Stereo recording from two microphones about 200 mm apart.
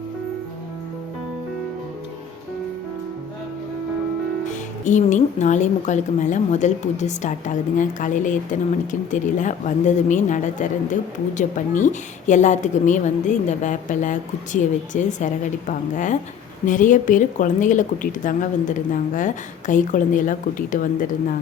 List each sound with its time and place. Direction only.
4.4 s a woman's voice: 40° left (ahead or behind)